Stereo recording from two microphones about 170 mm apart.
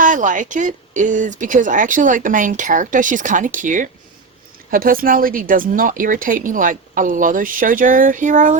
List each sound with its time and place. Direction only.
0.0 s speech: 50° right (ahead or behind)